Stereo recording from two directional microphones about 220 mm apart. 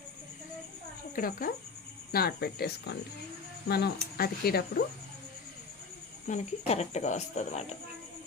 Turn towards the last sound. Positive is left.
turn(degrees=30)  # may be behind; listen again after turning